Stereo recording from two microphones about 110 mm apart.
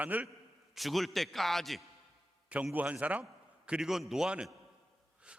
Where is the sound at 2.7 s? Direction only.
15° right (ahead or behind).